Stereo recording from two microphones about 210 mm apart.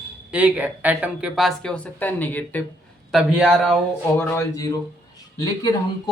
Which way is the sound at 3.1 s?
5° right (ahead or behind).